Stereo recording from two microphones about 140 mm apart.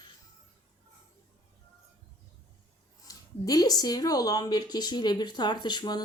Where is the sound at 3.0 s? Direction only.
25° left (ahead or behind).